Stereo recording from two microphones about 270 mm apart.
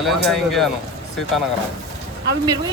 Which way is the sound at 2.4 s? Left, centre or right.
Centre.